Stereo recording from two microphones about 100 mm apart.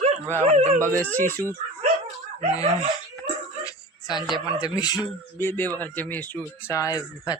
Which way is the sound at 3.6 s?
40° left (ahead or behind).